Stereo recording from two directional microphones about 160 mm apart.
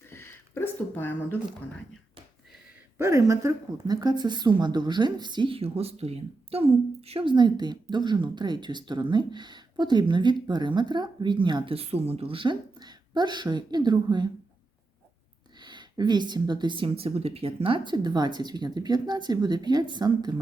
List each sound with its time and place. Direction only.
0.0 s a sound: 15° left (ahead or behind)
3.0 s speech: 20° right (ahead or behind)
15.5 s speech: 30° right (ahead or behind)